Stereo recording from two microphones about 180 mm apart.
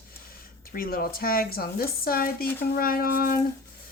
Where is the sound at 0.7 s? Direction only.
55° left (ahead or behind).